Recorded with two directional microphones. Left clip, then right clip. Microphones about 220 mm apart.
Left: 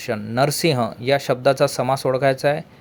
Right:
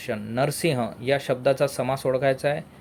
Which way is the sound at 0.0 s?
20° left (ahead or behind).